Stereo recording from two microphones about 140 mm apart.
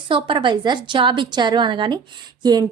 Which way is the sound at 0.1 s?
35° right (ahead or behind).